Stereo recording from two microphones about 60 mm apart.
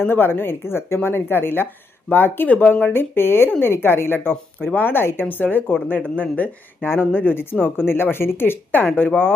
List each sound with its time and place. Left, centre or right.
0.0 s speech: left
6.8 s speech: left